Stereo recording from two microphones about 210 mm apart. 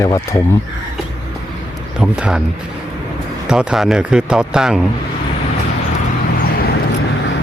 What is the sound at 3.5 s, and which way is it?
A man's voice, 5° right (ahead or behind).